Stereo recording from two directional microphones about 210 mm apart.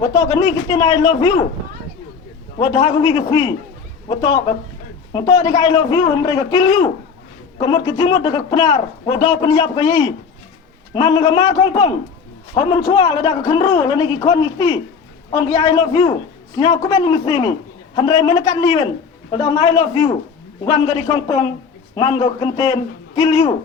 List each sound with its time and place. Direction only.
0.0 s a man's voice: 15° left (ahead or behind)
2.6 s a man's voice: 20° left (ahead or behind)